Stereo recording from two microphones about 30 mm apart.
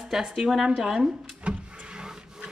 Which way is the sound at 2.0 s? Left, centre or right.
Right.